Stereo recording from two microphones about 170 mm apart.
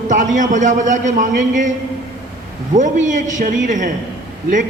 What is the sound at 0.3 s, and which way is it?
A man's voice, 45° right (ahead or behind).